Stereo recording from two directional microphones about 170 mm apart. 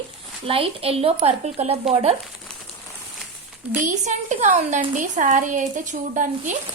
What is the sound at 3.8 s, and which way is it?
Speech, 45° right (ahead or behind).